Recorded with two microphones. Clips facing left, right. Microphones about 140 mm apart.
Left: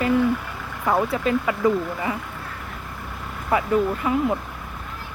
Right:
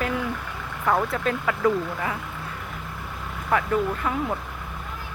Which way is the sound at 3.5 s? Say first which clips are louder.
Left 3 dB; 5° left (ahead or behind).